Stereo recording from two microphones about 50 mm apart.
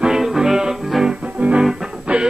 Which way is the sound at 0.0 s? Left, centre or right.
Centre.